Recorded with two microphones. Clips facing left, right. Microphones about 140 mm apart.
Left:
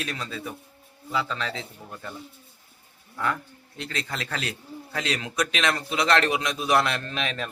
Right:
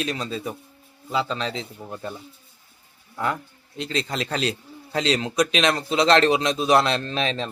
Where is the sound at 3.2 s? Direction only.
20° right (ahead or behind).